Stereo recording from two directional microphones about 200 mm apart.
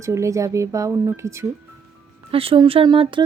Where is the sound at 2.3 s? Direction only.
30° right (ahead or behind).